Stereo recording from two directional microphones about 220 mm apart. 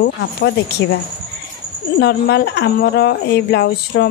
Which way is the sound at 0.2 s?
50° left (ahead or behind).